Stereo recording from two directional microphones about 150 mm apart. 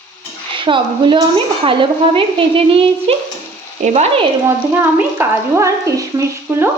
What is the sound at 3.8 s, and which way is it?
Frying, 45° right (ahead or behind).